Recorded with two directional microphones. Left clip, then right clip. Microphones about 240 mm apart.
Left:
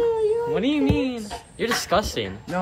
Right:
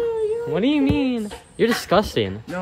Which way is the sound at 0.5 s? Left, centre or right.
Right.